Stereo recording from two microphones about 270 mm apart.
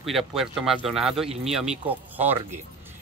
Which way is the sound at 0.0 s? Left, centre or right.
Centre.